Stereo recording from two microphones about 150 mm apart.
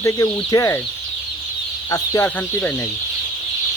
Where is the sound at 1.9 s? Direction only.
20° left (ahead or behind).